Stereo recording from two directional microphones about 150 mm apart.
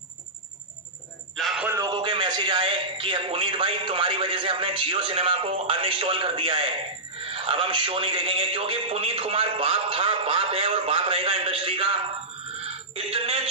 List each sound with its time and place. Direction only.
1.3 s a sound: centre (ahead or behind)
1.9 s a man's voice: 35° right (ahead or behind)
12.6 s music: 40° right (ahead or behind)